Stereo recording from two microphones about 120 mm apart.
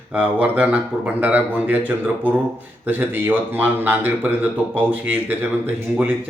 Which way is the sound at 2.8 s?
15° right (ahead or behind).